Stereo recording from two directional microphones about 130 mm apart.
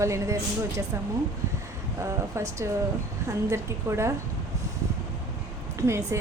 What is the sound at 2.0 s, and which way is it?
Speech, 20° right (ahead or behind).